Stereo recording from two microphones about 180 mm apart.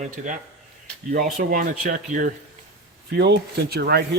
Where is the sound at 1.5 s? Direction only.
50° right (ahead or behind).